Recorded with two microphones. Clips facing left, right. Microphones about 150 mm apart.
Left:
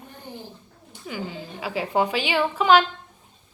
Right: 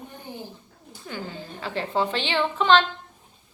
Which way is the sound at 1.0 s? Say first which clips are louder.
Left 2 dB; 10° left (ahead or behind).